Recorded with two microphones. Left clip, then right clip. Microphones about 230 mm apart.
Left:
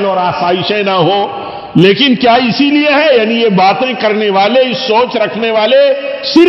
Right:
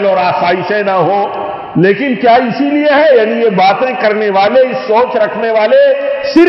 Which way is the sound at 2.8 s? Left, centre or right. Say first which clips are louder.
Right 3 dB; left.